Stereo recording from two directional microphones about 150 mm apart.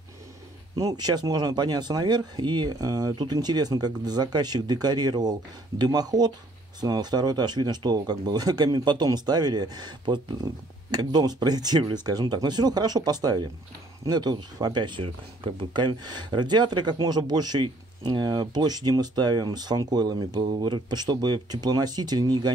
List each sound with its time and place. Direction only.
0.7 s speech: 25° right (ahead or behind)